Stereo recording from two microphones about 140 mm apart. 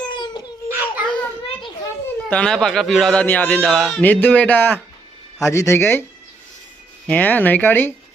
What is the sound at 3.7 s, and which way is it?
Speech, centre (ahead or behind).